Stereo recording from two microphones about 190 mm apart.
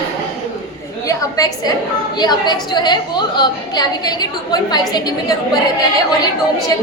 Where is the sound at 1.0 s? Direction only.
20° left (ahead or behind).